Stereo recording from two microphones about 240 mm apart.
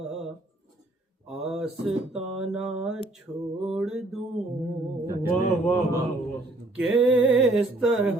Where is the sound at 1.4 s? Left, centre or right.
Centre.